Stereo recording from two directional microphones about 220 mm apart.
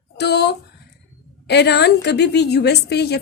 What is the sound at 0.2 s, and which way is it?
A woman's voice, 50° left (ahead or behind).